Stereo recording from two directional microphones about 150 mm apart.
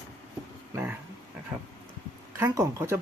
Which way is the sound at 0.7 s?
15° right (ahead or behind).